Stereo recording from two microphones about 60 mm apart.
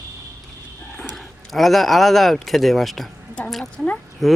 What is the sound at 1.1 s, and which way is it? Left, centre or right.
Speech, centre.